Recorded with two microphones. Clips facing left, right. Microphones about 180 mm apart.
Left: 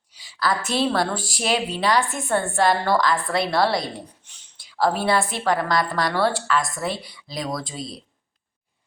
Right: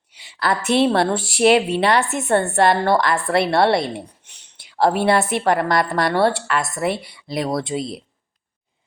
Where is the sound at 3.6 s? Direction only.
60° right (ahead or behind).